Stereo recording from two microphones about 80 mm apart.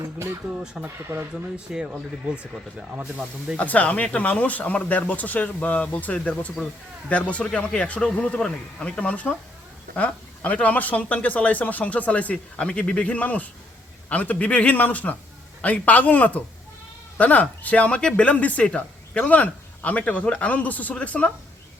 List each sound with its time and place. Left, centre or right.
0.0 s speech: right
0.6 s speech: centre
0.9 s speech: right
1.7 s speech: centre
3.6 s a man's voice: centre